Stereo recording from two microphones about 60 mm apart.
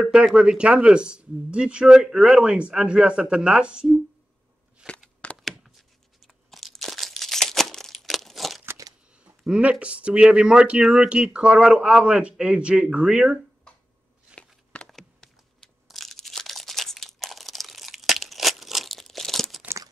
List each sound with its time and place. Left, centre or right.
0.0 s speech: centre
4.8 s a sound: centre
5.4 s a sound: centre
6.7 s crumpling: centre
9.5 s speech: right
14.9 s computer keyboard: centre
15.9 s crunch: centre